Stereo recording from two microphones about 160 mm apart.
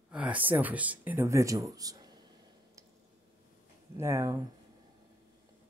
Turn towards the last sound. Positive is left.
turn(degrees=-20)  # may be behind; listen again after turning